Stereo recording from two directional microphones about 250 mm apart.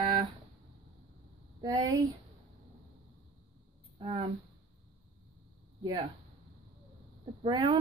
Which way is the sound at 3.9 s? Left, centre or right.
Right.